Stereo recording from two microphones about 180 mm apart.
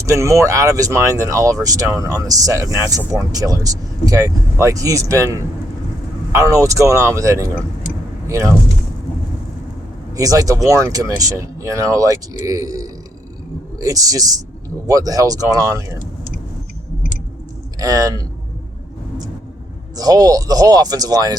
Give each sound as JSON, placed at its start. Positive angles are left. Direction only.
{"t": 0.0, "sound": "speech", "side_deg": -15}
{"t": 10.2, "sound": "speech", "side_deg": -20}
{"t": 17.7, "sound": "speech", "side_deg": -20}
{"t": 20.0, "sound": "speech", "side_deg": -20}